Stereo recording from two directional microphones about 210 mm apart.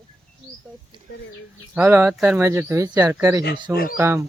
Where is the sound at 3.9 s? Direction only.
10° right (ahead or behind).